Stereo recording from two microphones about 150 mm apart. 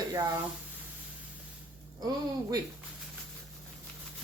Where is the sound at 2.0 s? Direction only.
25° right (ahead or behind).